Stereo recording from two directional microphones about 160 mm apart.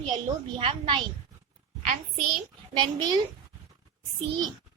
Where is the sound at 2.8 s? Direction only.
25° right (ahead or behind).